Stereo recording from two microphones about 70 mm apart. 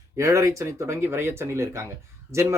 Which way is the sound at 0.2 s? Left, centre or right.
Right.